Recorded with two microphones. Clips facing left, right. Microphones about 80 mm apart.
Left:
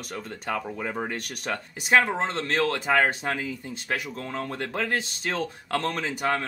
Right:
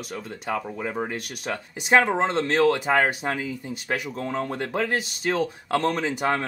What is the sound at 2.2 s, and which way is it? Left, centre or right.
Speech, right.